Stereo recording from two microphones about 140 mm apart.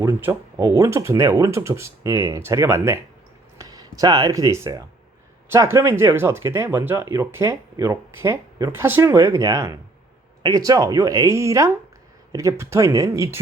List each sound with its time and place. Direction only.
0.2 s speech: 15° right (ahead or behind)